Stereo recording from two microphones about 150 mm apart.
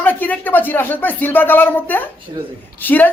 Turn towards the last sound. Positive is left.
turn(degrees=10)  # may be behind; listen again after turning